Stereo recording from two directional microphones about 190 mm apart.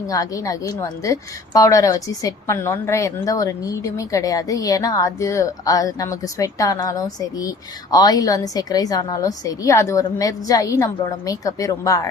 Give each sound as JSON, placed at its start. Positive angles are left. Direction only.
{"t": 0.1, "sound": "a woman's voice", "side_deg": 20}